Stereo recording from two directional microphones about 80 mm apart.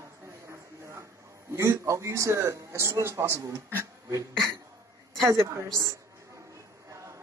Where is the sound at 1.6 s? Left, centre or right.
Right.